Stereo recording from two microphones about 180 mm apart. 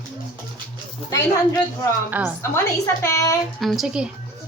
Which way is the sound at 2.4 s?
15° left (ahead or behind).